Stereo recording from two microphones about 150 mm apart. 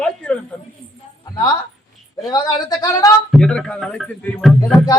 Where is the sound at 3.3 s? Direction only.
5° left (ahead or behind).